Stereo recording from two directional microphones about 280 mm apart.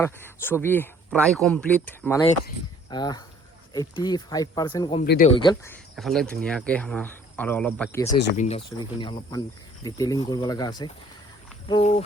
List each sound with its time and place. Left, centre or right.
0.0 s speech: centre
5.0 s speech: left
5.4 s speech: centre
6.0 s speech: centre
8.4 s speech: left